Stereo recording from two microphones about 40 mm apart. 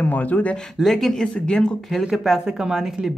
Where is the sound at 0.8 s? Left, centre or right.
Centre.